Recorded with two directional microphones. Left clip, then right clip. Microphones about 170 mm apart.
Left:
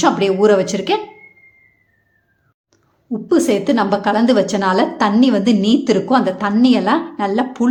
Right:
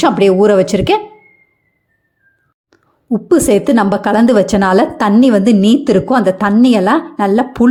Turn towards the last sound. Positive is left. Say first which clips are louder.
# right 5 dB
turn(degrees=-35)  # may be behind; listen again after turning